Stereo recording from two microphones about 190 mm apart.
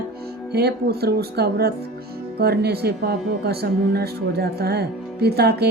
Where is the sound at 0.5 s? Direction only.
55° right (ahead or behind).